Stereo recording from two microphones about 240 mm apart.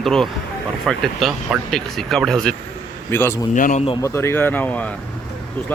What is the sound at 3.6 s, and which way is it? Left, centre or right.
Speech, left.